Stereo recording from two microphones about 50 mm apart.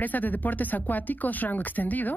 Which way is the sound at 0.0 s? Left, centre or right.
Left.